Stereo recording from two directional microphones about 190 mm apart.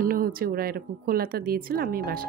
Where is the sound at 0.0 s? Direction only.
50° right (ahead or behind).